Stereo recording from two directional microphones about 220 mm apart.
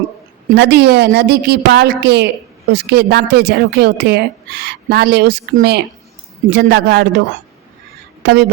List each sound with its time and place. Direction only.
0.5 s a woman's voice: 50° right (ahead or behind)
8.2 s a woman's voice: 45° right (ahead or behind)